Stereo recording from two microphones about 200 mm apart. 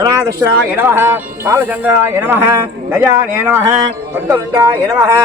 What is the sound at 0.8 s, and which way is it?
A man's voice, 10° right (ahead or behind).